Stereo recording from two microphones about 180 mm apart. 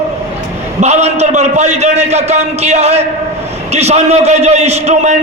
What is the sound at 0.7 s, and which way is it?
A man's voice, 40° right (ahead or behind).